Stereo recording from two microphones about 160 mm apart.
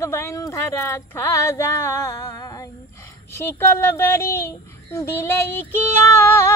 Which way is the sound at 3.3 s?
15° left (ahead or behind).